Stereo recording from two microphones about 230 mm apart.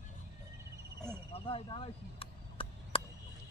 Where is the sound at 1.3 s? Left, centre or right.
Left.